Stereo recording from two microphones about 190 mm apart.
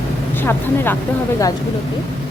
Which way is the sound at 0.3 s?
10° left (ahead or behind).